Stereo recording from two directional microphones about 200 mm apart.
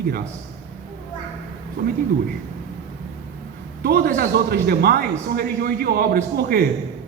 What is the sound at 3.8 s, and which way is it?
A man's voice, 50° right (ahead or behind).